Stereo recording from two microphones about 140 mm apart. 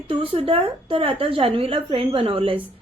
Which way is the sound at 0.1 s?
40° right (ahead or behind).